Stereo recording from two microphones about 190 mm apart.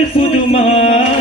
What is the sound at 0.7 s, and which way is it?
Music, 30° left (ahead or behind).